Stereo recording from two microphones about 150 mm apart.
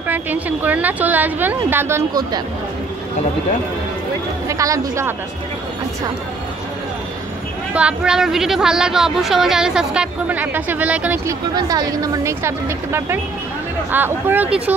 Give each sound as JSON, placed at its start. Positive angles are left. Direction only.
{"t": 0.1, "sound": "a woman's voice", "side_deg": -10}
{"t": 4.5, "sound": "speech", "side_deg": -20}
{"t": 7.7, "sound": "speech", "side_deg": -5}
{"t": 11.2, "sound": "a woman's voice", "side_deg": -25}